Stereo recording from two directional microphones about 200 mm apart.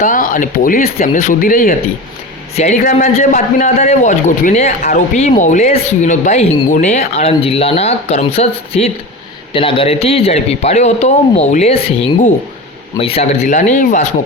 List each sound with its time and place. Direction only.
0.0 s a man's voice: 40° left (ahead or behind)